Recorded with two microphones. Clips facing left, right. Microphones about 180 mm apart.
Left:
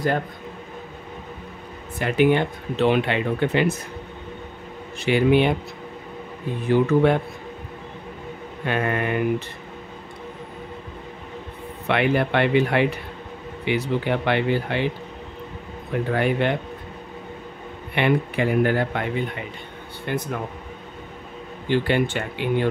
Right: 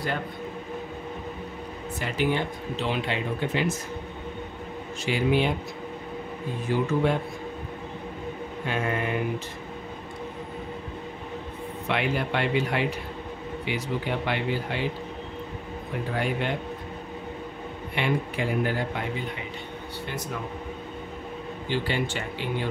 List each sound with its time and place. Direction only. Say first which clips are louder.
2.0 s speech: left 8 dB; 60° left (ahead or behind)
5.0 s speech: left 6 dB; 65° left (ahead or behind)
6.7 s speech: left 7 dB; 65° left (ahead or behind)
8.6 s speech: left 5 dB; 60° left (ahead or behind)
11.9 s speech: left 7 dB; 65° left (ahead or behind)
16.1 s speech: left 7 dB; 65° left (ahead or behind)
17.9 s speech: left 6 dB; 60° left (ahead or behind)
20.1 s speech: left 10 dB; 55° left (ahead or behind)
21.6 s speech: left 7 dB; 60° left (ahead or behind)